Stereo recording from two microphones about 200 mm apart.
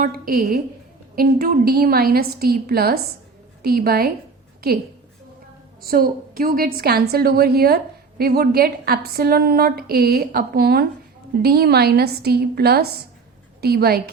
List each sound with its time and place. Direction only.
0.0 s a woman's voice: 45° right (ahead or behind)
5.8 s a woman's voice: 45° right (ahead or behind)